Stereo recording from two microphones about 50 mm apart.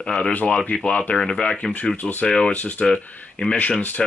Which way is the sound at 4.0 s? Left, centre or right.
Centre.